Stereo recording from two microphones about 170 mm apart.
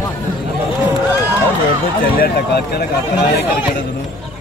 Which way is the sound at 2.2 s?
70° left (ahead or behind).